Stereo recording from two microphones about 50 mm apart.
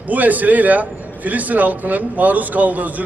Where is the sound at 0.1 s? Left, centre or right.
Right.